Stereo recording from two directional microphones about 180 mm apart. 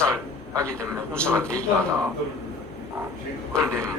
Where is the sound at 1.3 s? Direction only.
5° left (ahead or behind).